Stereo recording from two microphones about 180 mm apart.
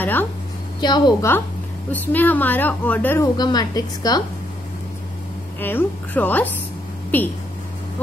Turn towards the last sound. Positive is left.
turn(degrees=10)  # may be behind; listen again after turning